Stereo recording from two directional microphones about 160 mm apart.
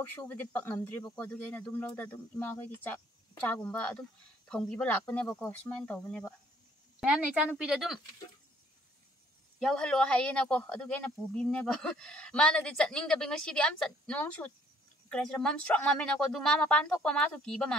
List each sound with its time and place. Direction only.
0.0 s speech: 10° left (ahead or behind)
7.0 s speech: 5° right (ahead or behind)
9.6 s speech: 5° left (ahead or behind)